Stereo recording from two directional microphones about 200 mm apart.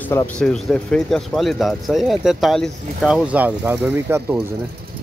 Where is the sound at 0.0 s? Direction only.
10° left (ahead or behind); by 4.4 s 10° right (ahead or behind).